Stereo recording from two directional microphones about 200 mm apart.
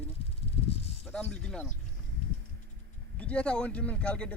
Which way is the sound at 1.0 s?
5° left (ahead or behind).